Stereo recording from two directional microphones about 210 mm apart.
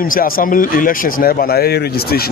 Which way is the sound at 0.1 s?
40° left (ahead or behind).